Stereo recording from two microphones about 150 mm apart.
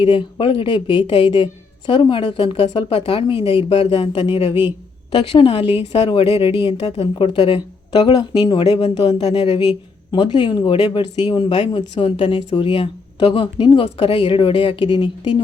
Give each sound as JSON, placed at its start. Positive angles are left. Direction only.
{"t": 0.0, "sound": "speech", "side_deg": 35}
{"t": 9.2, "sound": "speech", "side_deg": 40}